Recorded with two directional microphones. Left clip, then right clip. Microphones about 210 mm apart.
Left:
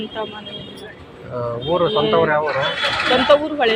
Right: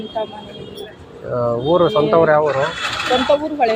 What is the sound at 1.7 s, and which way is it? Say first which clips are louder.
Speech: right 2 dB; 65° right (ahead or behind).